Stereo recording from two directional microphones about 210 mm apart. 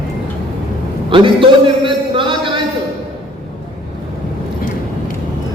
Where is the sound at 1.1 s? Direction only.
25° right (ahead or behind).